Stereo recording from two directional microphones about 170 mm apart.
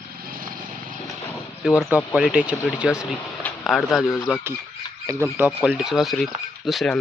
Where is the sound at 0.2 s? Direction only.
55° right (ahead or behind).